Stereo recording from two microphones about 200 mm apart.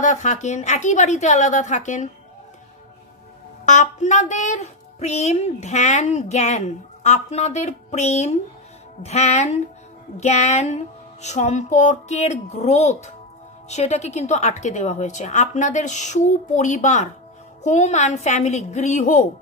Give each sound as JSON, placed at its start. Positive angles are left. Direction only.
{"t": 0.0, "sound": "a woman's voice", "side_deg": 35}
{"t": 3.6, "sound": "a woman's voice", "side_deg": 40}